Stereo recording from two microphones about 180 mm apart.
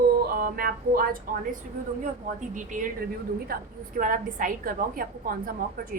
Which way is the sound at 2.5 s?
45° right (ahead or behind).